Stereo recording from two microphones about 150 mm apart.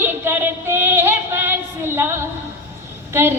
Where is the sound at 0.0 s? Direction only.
15° right (ahead or behind).